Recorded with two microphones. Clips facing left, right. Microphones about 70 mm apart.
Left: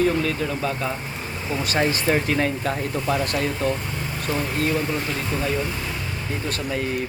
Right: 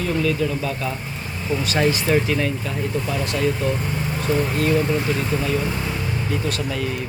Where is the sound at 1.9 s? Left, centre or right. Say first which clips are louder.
Right 2 dB; left.